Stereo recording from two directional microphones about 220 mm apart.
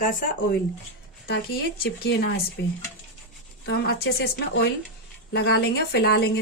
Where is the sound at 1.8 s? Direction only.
50° left (ahead or behind).